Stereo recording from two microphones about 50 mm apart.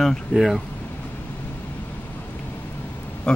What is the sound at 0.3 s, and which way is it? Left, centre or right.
Speech, centre.